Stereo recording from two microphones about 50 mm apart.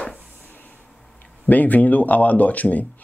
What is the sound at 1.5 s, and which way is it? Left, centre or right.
Speech, left.